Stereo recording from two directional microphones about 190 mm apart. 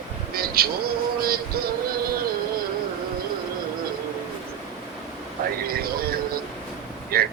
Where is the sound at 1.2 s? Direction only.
50° right (ahead or behind).